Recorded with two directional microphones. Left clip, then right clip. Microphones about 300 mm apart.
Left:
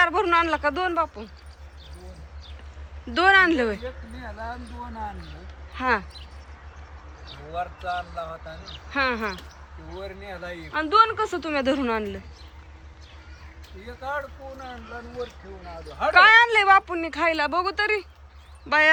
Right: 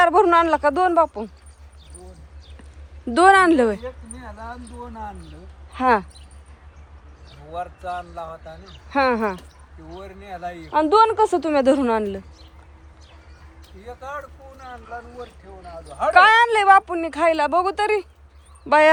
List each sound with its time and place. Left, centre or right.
0.0 s speech: centre
3.1 s speech: centre
3.8 s speech: right
5.7 s speech: centre
7.5 s speech: right; by 12.2 s centre
13.8 s speech: centre
16.1 s speech: centre